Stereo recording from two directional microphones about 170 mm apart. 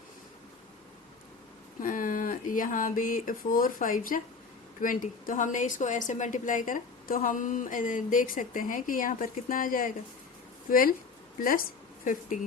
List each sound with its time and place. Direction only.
1.8 s a woman's voice: 50° left (ahead or behind)